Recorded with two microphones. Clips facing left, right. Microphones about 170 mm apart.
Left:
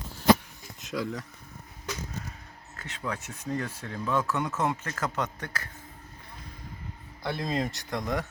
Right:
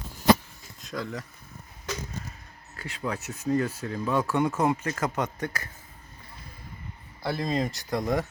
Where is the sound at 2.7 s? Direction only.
10° right (ahead or behind).